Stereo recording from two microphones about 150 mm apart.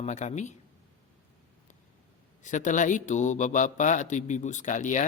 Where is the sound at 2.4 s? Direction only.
55° left (ahead or behind).